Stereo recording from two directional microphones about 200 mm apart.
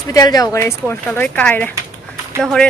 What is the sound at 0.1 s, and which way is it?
Speech, 20° left (ahead or behind).